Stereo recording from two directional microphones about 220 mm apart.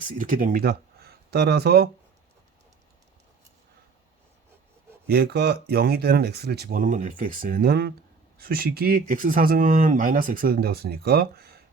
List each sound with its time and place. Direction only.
0.0 s speech: 40° right (ahead or behind)
5.0 s speech: 45° right (ahead or behind)